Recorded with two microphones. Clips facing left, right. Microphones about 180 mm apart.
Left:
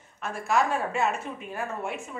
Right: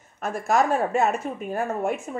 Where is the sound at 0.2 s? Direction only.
45° right (ahead or behind).